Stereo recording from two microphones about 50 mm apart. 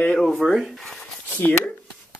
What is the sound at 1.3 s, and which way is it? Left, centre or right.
Speech, left.